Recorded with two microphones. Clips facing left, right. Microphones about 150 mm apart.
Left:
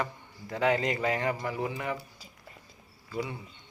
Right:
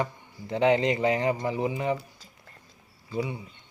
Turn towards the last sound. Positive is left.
turn(degrees=-15)  # may be behind; listen again after turning